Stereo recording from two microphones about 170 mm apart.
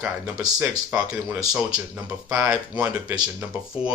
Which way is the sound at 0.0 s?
5° right (ahead or behind).